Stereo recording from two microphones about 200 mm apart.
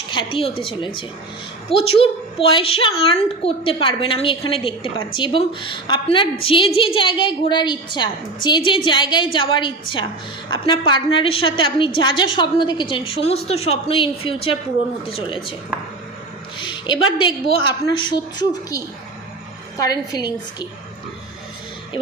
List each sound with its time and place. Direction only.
0.1 s a woman's voice: 25° left (ahead or behind)
16.6 s a sound: 25° left (ahead or behind)
17.6 s a woman's voice: 25° left (ahead or behind)
19.8 s a woman's voice: 20° left (ahead or behind)